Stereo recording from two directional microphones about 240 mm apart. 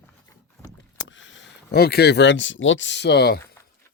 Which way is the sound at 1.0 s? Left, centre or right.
Left.